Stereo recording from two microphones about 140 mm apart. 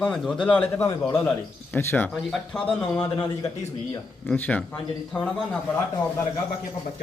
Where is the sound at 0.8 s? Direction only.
25° left (ahead or behind).